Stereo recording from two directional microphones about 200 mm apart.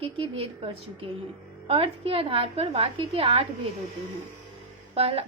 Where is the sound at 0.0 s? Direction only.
30° right (ahead or behind).